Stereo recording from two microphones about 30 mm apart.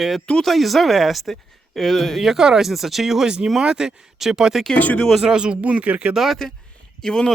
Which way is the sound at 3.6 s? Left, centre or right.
Right.